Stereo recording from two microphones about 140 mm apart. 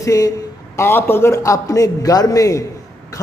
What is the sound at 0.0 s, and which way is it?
A man's voice, 25° left (ahead or behind).